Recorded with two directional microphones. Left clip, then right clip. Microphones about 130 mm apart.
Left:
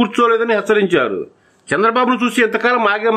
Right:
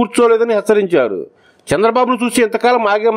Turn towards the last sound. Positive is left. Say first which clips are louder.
# right 2 dB
turn(degrees=-35)  # may be behind; listen again after turning